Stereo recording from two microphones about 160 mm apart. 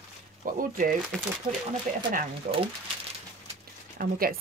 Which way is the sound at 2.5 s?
55° right (ahead or behind).